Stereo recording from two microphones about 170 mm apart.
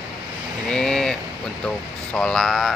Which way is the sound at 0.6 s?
5° left (ahead or behind).